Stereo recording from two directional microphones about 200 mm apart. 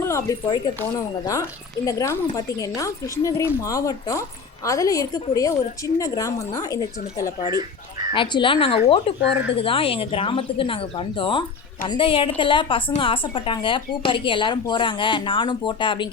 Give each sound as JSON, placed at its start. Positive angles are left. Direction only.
{"t": 0.0, "sound": "speech", "side_deg": 15}
{"t": 8.1, "sound": "a woman's voice", "side_deg": 25}